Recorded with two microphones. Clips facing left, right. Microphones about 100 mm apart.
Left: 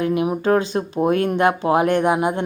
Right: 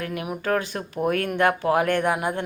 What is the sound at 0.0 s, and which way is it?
Speech, 20° left (ahead or behind).